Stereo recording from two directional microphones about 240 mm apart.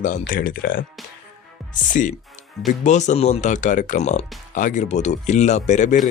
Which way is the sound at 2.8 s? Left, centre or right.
Left.